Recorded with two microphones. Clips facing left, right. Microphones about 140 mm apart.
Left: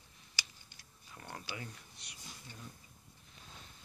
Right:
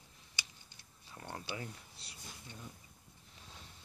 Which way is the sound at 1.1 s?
25° right (ahead or behind).